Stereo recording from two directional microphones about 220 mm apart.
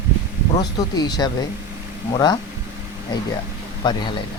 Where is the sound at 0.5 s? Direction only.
20° left (ahead or behind).